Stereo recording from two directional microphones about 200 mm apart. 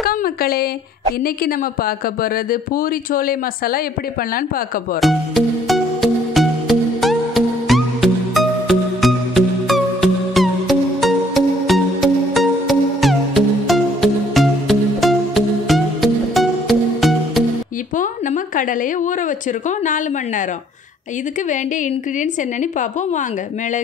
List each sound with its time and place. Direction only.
0.0 s speech: 45° left (ahead or behind)
5.0 s music: centre (ahead or behind)
17.9 s a sound: 40° left (ahead or behind)
19.8 s a woman's voice: 40° left (ahead or behind)
21.5 s a woman's voice: 40° left (ahead or behind)